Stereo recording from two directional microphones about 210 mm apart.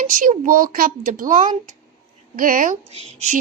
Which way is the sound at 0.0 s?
40° right (ahead or behind).